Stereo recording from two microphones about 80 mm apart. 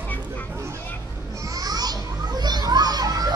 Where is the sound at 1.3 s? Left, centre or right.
Right.